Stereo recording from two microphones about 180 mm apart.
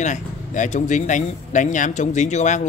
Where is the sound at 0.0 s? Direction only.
40° left (ahead or behind).